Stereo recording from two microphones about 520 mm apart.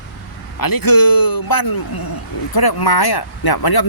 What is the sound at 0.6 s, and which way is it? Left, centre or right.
Speech, left.